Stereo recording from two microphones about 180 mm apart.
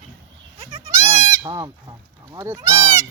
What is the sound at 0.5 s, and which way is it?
Goat, 30° right (ahead or behind).